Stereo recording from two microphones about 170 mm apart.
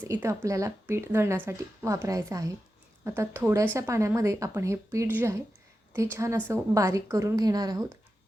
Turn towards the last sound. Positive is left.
turn(degrees=-20)  # may be behind; listen again after turning